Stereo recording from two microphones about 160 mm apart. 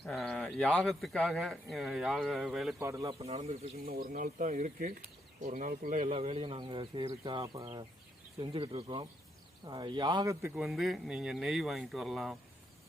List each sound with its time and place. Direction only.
0.0 s speech: centre (ahead or behind)
2.7 s speech: 20° right (ahead or behind)
3.2 s speech: 40° right (ahead or behind)
3.8 s speech: 65° right (ahead or behind)
6.0 s speech: 40° right (ahead or behind); by 10.5 s 20° right (ahead or behind)
10.5 s speech: 5° right (ahead or behind)